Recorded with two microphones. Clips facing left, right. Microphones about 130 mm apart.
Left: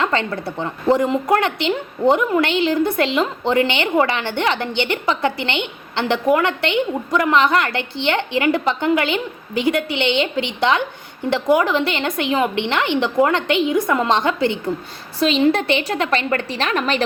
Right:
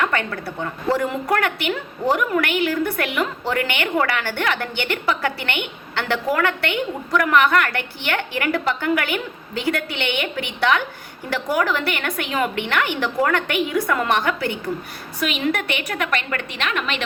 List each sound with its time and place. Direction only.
0.0 s a woman's voice: 25° left (ahead or behind)